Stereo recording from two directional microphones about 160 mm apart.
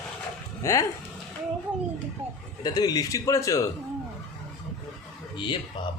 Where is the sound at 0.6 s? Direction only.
20° left (ahead or behind).